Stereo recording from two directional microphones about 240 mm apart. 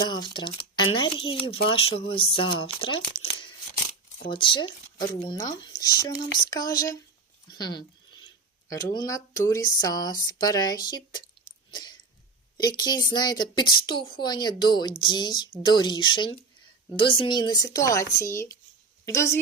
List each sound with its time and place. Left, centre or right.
0.0 s speech: centre
4.3 s a woman's voice: left
7.5 s a sound: centre
8.7 s a woman's voice: centre
11.7 s throat clearing: centre
12.5 s a woman's voice: centre